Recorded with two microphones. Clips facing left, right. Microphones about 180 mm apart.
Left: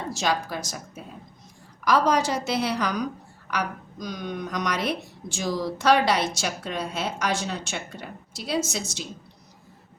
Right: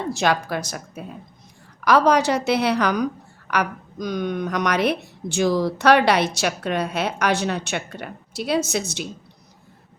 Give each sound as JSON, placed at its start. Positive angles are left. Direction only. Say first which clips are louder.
{"t": 0.1, "sound": "a woman's voice", "louder": "right 5 dB", "side_deg": -60}